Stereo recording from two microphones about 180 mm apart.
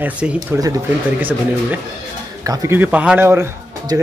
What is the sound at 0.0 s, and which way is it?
Speech, 10° right (ahead or behind).